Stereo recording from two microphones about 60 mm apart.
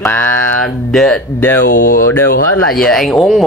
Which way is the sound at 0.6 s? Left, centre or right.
Centre.